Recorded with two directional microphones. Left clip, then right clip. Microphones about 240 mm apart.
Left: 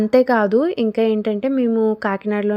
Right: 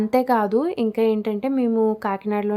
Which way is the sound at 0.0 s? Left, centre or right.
Centre.